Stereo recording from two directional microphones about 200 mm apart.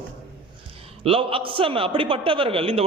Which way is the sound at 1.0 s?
25° right (ahead or behind).